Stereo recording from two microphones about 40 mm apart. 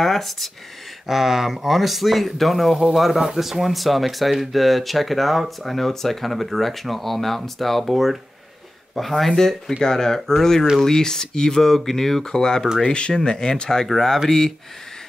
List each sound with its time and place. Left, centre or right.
0.0 s speech: centre